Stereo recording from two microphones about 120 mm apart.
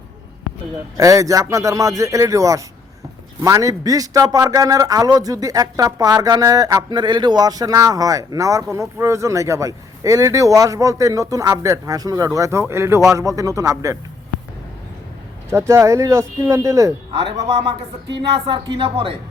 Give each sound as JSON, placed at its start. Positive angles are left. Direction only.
{"t": 0.9, "sound": "a man's voice", "side_deg": -25}
{"t": 15.4, "sound": "a man's voice", "side_deg": -20}
{"t": 18.2, "sound": "a woman's voice", "side_deg": -45}